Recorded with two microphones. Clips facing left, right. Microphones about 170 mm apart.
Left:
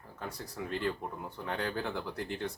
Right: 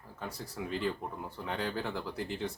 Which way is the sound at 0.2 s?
Centre (ahead or behind).